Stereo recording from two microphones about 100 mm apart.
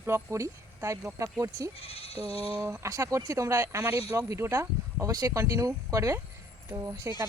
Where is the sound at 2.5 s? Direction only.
20° right (ahead or behind).